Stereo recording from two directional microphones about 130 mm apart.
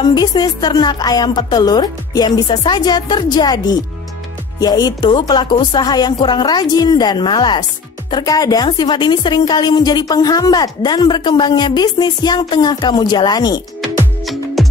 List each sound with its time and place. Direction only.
0.0 s a woman's voice: 30° left (ahead or behind)
14.2 s music: centre (ahead or behind)